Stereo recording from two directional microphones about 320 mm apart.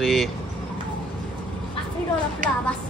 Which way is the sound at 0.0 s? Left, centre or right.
Centre.